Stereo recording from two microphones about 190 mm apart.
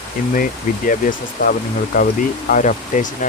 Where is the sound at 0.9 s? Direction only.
45° left (ahead or behind).